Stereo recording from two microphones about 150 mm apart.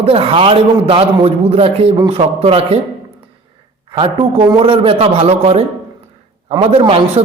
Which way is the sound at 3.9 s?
35° right (ahead or behind).